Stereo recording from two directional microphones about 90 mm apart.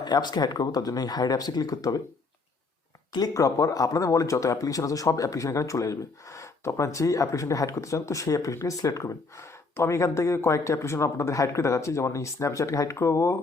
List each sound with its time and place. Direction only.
0.0 s speech: 50° left (ahead or behind)
3.1 s speech: 45° left (ahead or behind); by 13.3 s 30° left (ahead or behind)